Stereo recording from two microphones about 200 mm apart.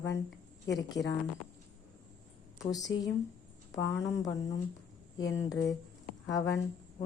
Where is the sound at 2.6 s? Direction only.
15° left (ahead or behind).